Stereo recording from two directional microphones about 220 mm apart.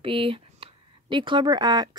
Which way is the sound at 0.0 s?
25° right (ahead or behind).